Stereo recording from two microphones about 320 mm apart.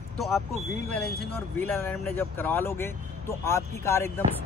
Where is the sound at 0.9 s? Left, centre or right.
Centre.